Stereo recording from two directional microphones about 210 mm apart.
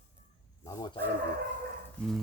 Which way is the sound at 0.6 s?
20° left (ahead or behind).